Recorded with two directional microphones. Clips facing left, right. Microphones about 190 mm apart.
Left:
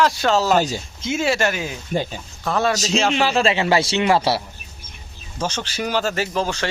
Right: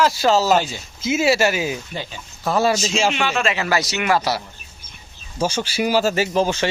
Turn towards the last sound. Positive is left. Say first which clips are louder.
# right 4 dB
turn(degrees=-15)  # may be behind; listen again after turning